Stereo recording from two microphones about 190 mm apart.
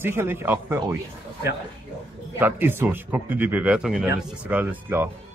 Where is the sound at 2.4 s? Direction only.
10° right (ahead or behind).